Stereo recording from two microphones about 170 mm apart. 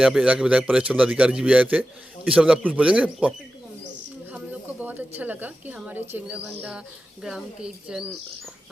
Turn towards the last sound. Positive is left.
turn(degrees=0)  # may be behind; listen again after turning